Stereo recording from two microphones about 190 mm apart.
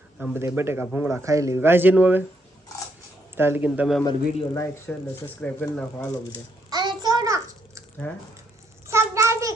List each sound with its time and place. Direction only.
0.2 s a man's voice: 10° right (ahead or behind)
3.3 s a man's voice: 10° right (ahead or behind)
4.0 s a man's voice: 25° left (ahead or behind)
4.9 s speech: 10° left (ahead or behind)
6.7 s a sound: 20° right (ahead or behind)
8.9 s a sound: 15° right (ahead or behind)